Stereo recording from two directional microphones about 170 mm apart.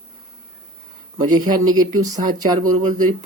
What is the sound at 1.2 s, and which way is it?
Speech, 25° right (ahead or behind).